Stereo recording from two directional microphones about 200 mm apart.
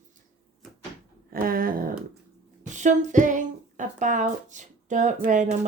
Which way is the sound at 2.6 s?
40° right (ahead or behind).